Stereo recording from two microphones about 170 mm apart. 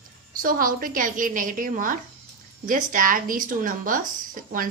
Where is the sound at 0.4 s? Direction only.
55° right (ahead or behind).